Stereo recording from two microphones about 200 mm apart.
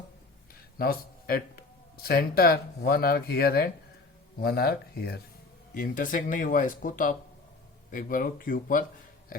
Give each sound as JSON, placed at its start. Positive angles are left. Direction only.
{"t": 0.8, "sound": "speech", "side_deg": 50}